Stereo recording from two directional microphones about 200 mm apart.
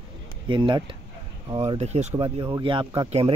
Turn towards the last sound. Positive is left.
turn(degrees=-25)  # may be behind; listen again after turning